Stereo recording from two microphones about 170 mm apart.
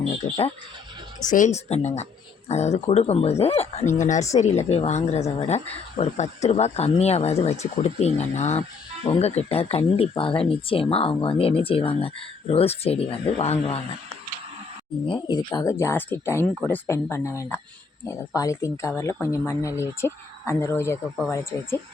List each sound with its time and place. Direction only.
1.2 s speech: 50° left (ahead or behind)
15.0 s speech: 25° left (ahead or behind)